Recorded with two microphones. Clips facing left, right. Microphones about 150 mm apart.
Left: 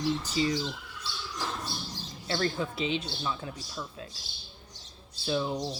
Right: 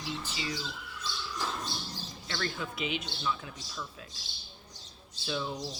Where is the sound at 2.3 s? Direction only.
30° left (ahead or behind).